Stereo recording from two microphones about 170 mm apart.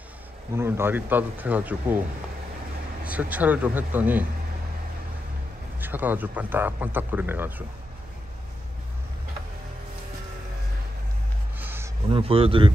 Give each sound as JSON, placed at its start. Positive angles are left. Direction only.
{"t": 0.6, "sound": "speech", "side_deg": -15}
{"t": 5.8, "sound": "speech", "side_deg": -10}
{"t": 11.5, "sound": "a sound", "side_deg": -10}
{"t": 12.1, "sound": "speech", "side_deg": -35}